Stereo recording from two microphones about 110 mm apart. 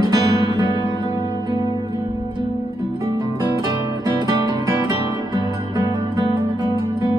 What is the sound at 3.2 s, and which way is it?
Music, 35° right (ahead or behind).